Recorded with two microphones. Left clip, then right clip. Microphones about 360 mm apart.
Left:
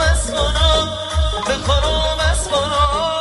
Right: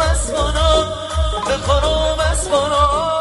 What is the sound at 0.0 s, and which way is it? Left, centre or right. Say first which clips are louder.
Music: even; right.